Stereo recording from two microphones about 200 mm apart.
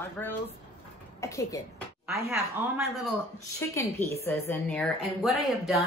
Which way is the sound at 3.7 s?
15° left (ahead or behind).